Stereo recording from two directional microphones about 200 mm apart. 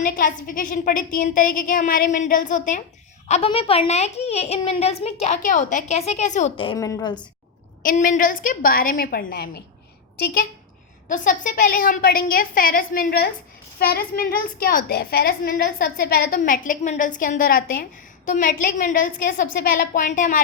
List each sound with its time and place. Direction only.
0.0 s a woman's voice: 40° left (ahead or behind)
6.7 s a woman's voice: 15° left (ahead or behind)
7.8 s a woman's voice: 40° left (ahead or behind)
11.1 s a woman's voice: 40° left (ahead or behind)